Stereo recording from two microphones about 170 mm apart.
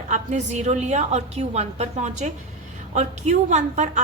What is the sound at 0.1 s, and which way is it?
A woman's voice, 45° right (ahead or behind).